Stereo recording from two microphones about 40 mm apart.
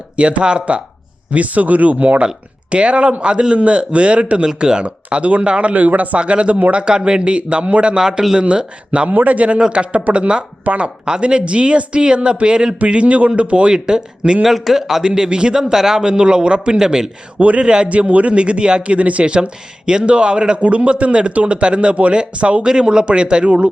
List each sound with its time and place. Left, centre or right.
0.2 s a man's voice: right
1.3 s a man's voice: right
5.1 s speech: right
6.1 s a man's voice: right
9.0 s a man's voice: right
14.4 s a man's voice: centre; by 15.6 s right
15.6 s a man's voice: centre
17.8 s speech: right
19.2 s a man's voice: right
22.6 s a man's voice: right